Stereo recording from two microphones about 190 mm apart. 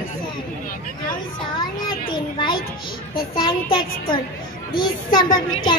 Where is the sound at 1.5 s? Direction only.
25° left (ahead or behind).